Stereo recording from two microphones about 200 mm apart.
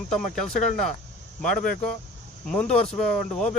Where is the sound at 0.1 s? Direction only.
Centre (ahead or behind).